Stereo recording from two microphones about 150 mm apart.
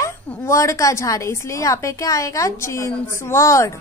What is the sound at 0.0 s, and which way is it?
A woman's voice, 20° left (ahead or behind).